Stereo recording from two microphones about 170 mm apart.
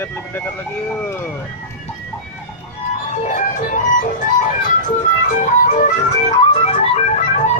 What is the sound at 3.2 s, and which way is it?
Music, 50° left (ahead or behind).